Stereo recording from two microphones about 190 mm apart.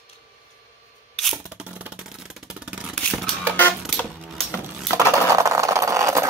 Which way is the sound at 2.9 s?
5° left (ahead or behind).